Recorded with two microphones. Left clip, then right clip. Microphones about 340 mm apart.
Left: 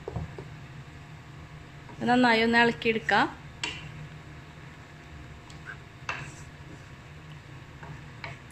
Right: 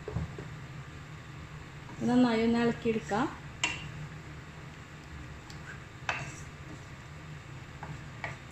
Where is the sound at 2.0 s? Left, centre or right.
Left.